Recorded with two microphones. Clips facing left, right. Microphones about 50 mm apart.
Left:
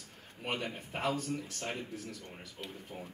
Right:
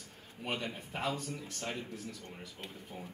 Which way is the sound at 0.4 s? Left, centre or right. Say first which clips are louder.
Left 1 dB; left.